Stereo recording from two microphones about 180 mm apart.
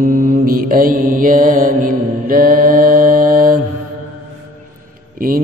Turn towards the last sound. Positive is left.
turn(degrees=-55)  # may be behind; listen again after turning